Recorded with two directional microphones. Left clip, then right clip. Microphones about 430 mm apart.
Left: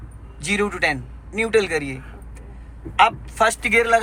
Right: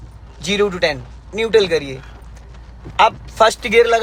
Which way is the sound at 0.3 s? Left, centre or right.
Centre.